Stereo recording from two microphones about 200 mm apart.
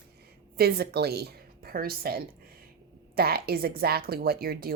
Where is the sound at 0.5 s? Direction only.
50° right (ahead or behind).